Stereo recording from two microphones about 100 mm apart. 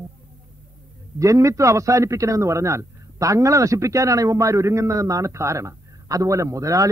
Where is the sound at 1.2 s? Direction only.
35° right (ahead or behind).